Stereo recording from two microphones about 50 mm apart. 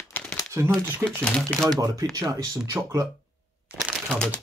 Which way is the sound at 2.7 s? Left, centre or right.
Right.